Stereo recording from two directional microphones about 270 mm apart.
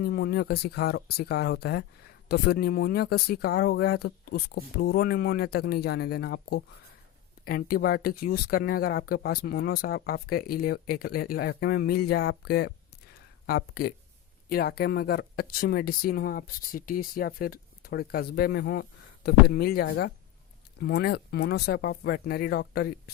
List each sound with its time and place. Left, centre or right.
0.0 s speech: left